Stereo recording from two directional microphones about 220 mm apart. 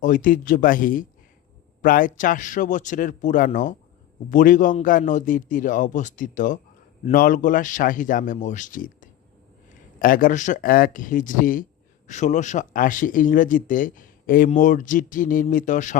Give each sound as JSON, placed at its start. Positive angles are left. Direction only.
{"t": 0.0, "sound": "speech", "side_deg": 40}